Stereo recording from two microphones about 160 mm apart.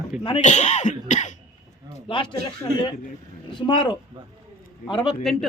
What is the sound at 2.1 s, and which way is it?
Speech, 30° left (ahead or behind).